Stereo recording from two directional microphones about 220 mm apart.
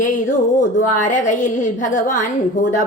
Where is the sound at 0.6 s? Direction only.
35° left (ahead or behind).